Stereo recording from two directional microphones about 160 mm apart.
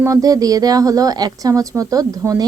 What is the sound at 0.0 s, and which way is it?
A woman's voice, 20° right (ahead or behind).